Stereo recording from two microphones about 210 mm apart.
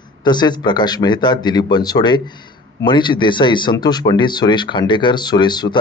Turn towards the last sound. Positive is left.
turn(degrees=20)  # may be behind; listen again after turning